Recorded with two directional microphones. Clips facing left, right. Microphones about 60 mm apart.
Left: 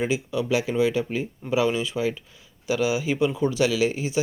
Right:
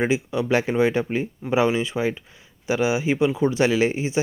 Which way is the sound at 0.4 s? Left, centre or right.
Right.